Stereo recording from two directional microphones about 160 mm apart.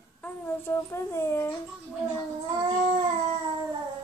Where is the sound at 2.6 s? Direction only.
30° right (ahead or behind).